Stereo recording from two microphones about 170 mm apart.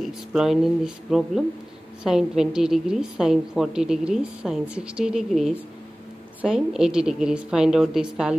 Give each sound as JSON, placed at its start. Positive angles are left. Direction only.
{"t": 0.0, "sound": "a woman's voice", "side_deg": 0}